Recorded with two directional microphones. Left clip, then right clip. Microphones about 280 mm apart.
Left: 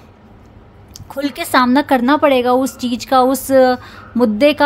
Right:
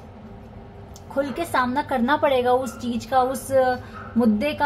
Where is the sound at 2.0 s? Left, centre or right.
Left.